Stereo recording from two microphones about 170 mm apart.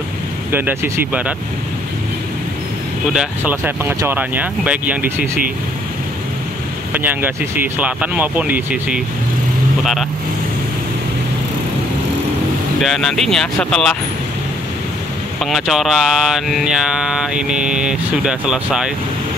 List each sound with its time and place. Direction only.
0.5 s speech: 10° right (ahead or behind)
3.1 s speech: 5° right (ahead or behind)
6.9 s speech: 10° right (ahead or behind)
12.8 s mantra: centre (ahead or behind)
15.4 s mantra: centre (ahead or behind)